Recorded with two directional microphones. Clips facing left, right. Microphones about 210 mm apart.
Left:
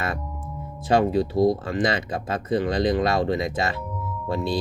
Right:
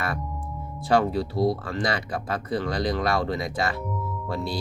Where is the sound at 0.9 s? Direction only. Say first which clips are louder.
Left 2 dB; 20° left (ahead or behind).